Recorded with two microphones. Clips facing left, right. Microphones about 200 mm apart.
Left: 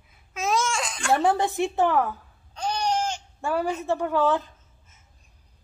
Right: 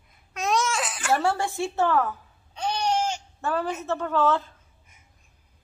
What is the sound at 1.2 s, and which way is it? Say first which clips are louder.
Speech: left 3 dB; 20° left (ahead or behind).